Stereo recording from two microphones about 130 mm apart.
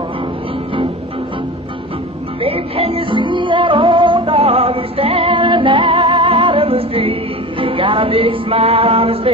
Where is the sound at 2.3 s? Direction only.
45° right (ahead or behind).